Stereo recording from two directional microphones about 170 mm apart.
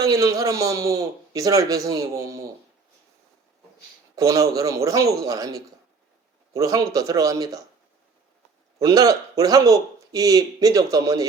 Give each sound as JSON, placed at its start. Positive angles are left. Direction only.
{"t": 0.0, "sound": "a man's voice", "side_deg": -20}
{"t": 4.1, "sound": "a man's voice", "side_deg": -20}
{"t": 8.8, "sound": "a man's voice", "side_deg": -20}